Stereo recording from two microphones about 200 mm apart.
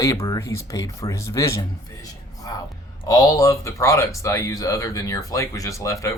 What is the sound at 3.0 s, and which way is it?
Speech, 20° left (ahead or behind).